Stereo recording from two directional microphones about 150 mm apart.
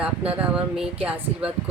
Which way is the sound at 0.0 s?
10° right (ahead or behind).